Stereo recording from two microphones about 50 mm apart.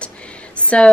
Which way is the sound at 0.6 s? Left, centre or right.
Left.